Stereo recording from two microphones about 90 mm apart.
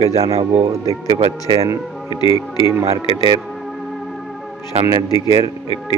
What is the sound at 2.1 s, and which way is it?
Speech, 70° left (ahead or behind).